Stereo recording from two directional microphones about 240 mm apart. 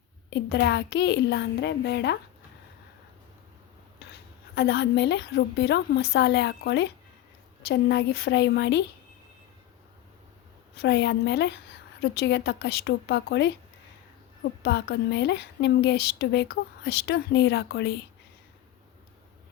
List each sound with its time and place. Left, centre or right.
0.3 s speech: left
4.5 s speech: left
10.8 s speech: left
14.6 s speech: left